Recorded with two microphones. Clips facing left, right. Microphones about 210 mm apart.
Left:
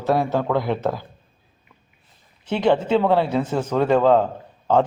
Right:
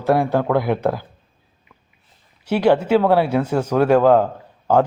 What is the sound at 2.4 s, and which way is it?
A man's voice, 10° right (ahead or behind).